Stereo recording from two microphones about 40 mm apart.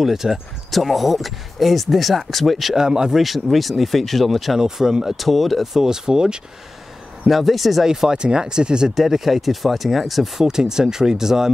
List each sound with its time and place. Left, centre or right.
0.0 s speech: centre
2.7 s speech: centre
3.2 s speech: centre
4.6 s speech: centre
5.9 s speech: centre
7.2 s speech: centre
8.9 s speech: centre